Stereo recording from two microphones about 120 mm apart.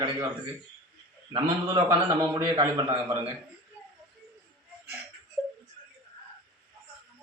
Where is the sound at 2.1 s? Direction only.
35° right (ahead or behind).